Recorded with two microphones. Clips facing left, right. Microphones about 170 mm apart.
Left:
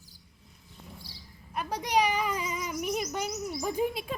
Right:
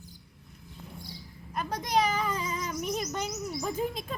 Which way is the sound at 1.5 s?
10° left (ahead or behind).